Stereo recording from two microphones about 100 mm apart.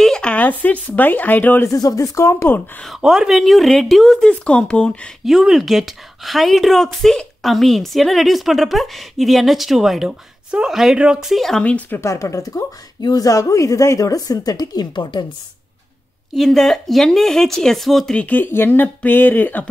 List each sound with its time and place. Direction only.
0.0 s speech: 10° left (ahead or behind)
1.7 s speech: 35° left (ahead or behind)
2.8 s speech: centre (ahead or behind)
5.2 s speech: 5° right (ahead or behind)
11.6 s speech: 15° left (ahead or behind)
12.0 s a woman's voice: 30° left (ahead or behind); by 15.2 s 50° left (ahead or behind)
16.3 s speech: 5° left (ahead or behind)
18.2 s speech: 20° left (ahead or behind)